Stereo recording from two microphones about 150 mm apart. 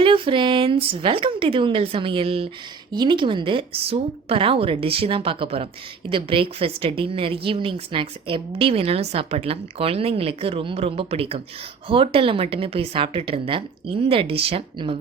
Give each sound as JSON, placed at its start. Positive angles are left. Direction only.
{"t": 0.0, "sound": "a woman's voice", "side_deg": -35}